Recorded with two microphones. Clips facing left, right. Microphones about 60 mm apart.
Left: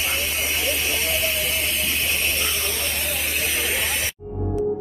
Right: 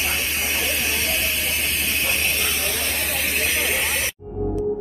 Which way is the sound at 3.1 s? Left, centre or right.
Right.